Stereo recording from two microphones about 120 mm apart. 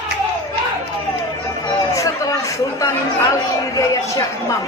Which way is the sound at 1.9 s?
25° left (ahead or behind).